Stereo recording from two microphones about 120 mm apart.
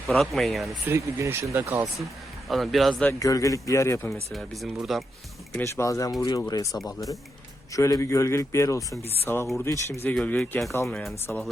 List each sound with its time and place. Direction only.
0.1 s speech: centre (ahead or behind)
0.9 s speech: 20° right (ahead or behind)
2.5 s speech: centre (ahead or behind)
3.2 s a man's voice: 30° left (ahead or behind)
4.1 s speech: centre (ahead or behind)
5.5 s a man's voice: 25° left (ahead or behind)
10.2 s speech: 10° left (ahead or behind)